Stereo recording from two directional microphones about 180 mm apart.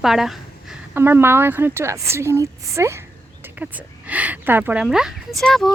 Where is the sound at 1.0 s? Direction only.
10° right (ahead or behind).